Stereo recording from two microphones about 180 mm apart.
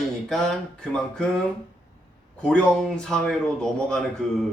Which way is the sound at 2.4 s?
5° left (ahead or behind).